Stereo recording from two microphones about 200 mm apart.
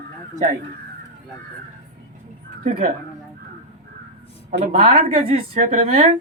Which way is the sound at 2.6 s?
35° right (ahead or behind).